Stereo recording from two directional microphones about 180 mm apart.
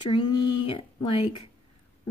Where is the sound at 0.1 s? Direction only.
30° left (ahead or behind).